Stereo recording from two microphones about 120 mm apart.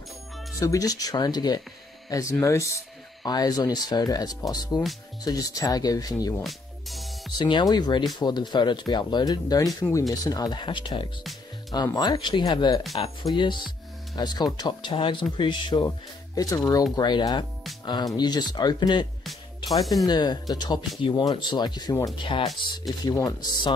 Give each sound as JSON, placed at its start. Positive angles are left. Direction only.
{"t": 0.6, "sound": "speech", "side_deg": 30}
{"t": 6.4, "sound": "music", "side_deg": 0}
{"t": 7.3, "sound": "speech", "side_deg": 40}